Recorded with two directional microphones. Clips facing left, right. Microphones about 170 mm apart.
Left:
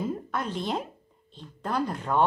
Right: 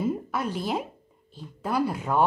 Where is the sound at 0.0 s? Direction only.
5° right (ahead or behind).